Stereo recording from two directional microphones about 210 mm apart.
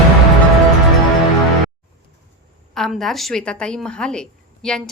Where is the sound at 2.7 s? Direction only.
Centre (ahead or behind).